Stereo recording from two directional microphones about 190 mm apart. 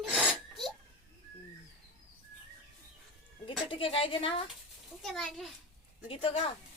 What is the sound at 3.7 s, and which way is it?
Speech, 30° left (ahead or behind).